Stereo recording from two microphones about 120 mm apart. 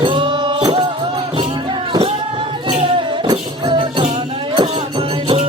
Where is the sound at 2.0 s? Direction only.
45° right (ahead or behind).